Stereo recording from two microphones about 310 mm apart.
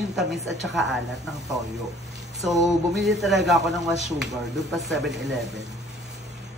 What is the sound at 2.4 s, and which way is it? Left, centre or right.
Speech, centre.